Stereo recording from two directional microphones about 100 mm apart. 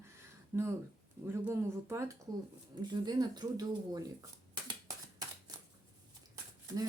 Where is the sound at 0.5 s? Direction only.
25° right (ahead or behind).